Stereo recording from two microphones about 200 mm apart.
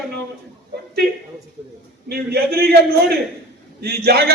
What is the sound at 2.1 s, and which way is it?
A man's voice, 50° right (ahead or behind).